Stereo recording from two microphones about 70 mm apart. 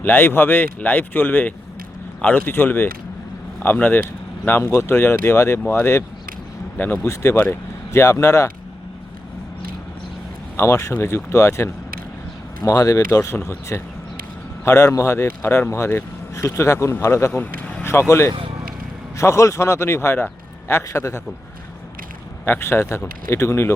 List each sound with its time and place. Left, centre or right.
0.0 s speech: left
4.6 s speech: left
6.7 s speech: left
7.0 s speech: left
10.6 s speech: left
17.4 s a sound: left
19.1 s speech: left
22.4 s speech: left